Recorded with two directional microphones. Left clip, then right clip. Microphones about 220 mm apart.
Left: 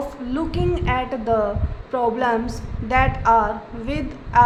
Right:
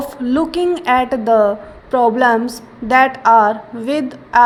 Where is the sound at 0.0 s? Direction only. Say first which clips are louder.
Right 8 dB; 30° right (ahead or behind).